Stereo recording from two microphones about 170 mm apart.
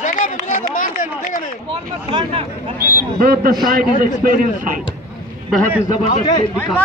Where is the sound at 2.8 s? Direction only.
60° right (ahead or behind).